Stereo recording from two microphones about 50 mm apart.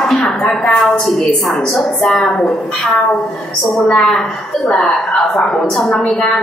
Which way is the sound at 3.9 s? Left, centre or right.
Centre.